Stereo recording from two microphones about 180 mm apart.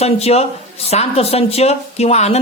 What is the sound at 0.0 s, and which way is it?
A woman's voice, 35° left (ahead or behind).